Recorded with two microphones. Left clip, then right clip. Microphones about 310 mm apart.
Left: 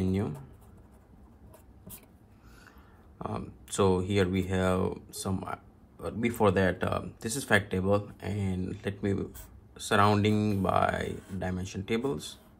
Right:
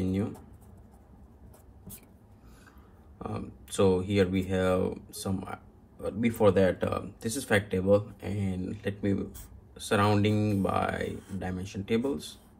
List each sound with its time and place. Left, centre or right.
3.2 s speech: left